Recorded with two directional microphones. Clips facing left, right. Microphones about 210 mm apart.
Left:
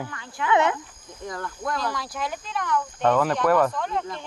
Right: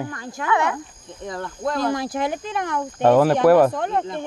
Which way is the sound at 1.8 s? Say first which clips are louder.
Right 7 dB; 50° right (ahead or behind).